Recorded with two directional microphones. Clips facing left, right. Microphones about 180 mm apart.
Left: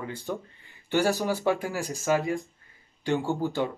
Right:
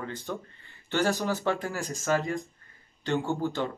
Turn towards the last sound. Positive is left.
turn(degrees=15)  # may be behind; listen again after turning